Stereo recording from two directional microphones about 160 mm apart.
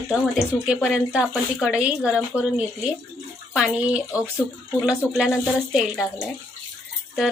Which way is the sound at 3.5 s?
5° right (ahead or behind).